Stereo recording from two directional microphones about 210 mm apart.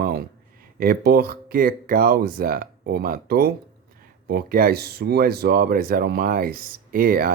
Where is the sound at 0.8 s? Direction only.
45° right (ahead or behind).